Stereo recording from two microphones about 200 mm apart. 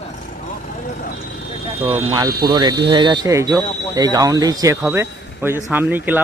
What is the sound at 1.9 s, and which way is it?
A man's voice, 15° right (ahead or behind).